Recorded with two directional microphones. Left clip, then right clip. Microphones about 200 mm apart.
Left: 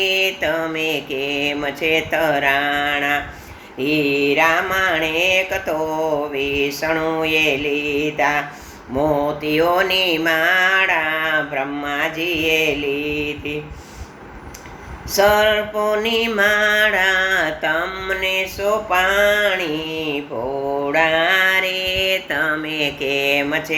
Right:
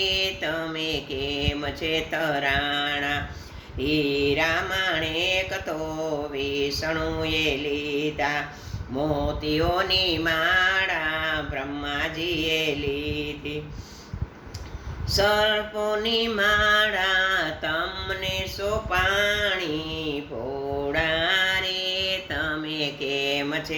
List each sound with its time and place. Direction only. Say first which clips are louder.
0.0 s mantra: left 7 dB; 15° right (ahead or behind)
15.1 s mantra: left 7 dB; 15° right (ahead or behind)